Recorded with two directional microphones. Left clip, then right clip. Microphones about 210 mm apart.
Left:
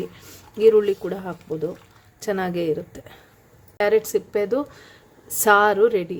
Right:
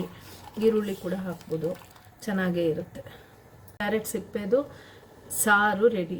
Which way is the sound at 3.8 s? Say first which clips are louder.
Left 10 dB; 45° left (ahead or behind).